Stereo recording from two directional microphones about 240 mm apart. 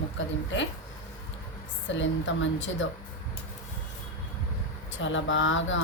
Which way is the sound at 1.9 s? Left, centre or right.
Left.